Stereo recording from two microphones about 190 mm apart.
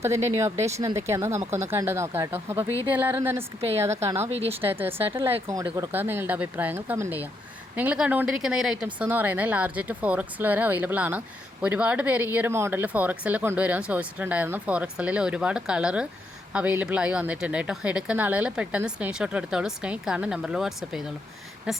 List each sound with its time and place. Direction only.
0.0 s speech: 15° right (ahead or behind)
3.9 s speech: 35° right (ahead or behind)
4.7 s a woman's voice: 10° right (ahead or behind)